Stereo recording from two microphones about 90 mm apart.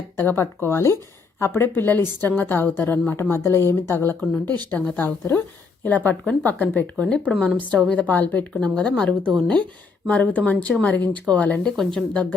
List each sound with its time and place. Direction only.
0.2 s a woman's voice: 25° left (ahead or behind); by 12.3 s 10° left (ahead or behind)